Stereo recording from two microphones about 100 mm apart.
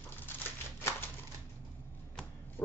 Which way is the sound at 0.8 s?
25° left (ahead or behind).